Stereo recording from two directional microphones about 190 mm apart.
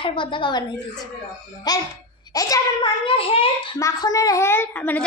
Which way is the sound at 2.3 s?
20° left (ahead or behind).